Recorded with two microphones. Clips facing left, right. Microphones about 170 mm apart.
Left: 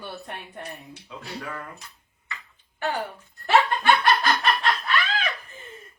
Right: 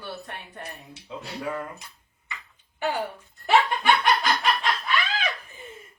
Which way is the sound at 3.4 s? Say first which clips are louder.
Left 1 dB; 10° right (ahead or behind).